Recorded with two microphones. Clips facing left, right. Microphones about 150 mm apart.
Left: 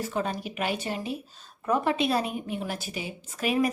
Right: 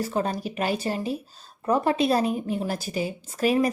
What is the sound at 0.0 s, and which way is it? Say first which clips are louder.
A woman's voice: right 3 dB; 40° right (ahead or behind).